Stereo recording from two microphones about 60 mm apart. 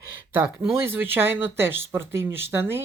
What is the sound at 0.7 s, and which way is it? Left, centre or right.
Speech, right.